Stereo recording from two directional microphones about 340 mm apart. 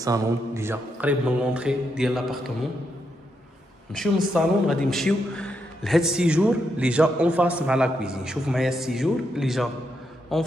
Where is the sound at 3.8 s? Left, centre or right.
Centre.